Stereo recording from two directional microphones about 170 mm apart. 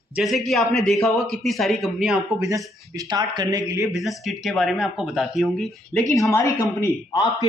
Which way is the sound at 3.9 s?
Centre (ahead or behind).